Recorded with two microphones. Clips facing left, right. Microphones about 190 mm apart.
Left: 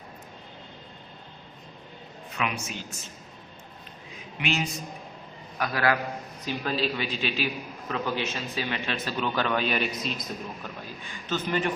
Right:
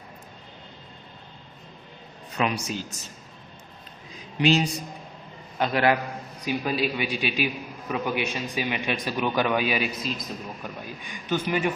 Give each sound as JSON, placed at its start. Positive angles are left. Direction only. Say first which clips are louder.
{"t": 2.4, "sound": "speech", "louder": "right 5 dB", "side_deg": -35}
{"t": 4.4, "sound": "a man's voice", "louder": "right 8 dB", "side_deg": -35}
{"t": 6.4, "sound": "a man's voice", "louder": "right 3 dB", "side_deg": -15}
{"t": 10.6, "sound": "a man's voice", "louder": "right 2 dB", "side_deg": -15}